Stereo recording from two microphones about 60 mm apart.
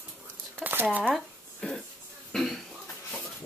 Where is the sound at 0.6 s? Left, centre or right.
Right.